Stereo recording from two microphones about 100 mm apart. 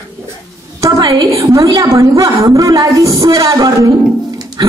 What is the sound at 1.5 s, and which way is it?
A woman's voice, 35° right (ahead or behind).